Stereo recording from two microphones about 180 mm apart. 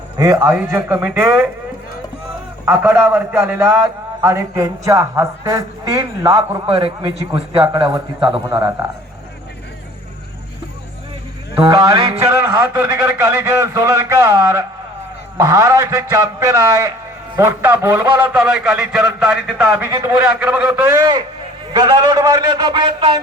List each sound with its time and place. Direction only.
0.2 s a man's voice: 20° right (ahead or behind)
2.6 s a man's voice: 10° right (ahead or behind)
11.8 s a man's voice: 20° right (ahead or behind); by 19.7 s 5° right (ahead or behind)
19.8 s a man's voice: 20° right (ahead or behind)
20.1 s a man's voice: 5° right (ahead or behind); by 23.2 s 25° right (ahead or behind)